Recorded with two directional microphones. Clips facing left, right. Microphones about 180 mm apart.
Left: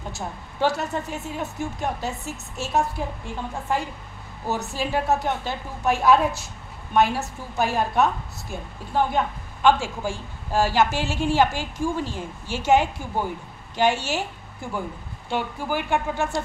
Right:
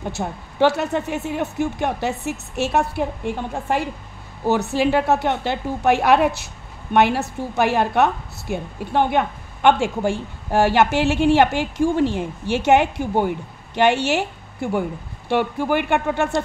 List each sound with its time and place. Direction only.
0.1 s a woman's voice: 70° right (ahead or behind)
4.5 s a woman's voice: 70° right (ahead or behind)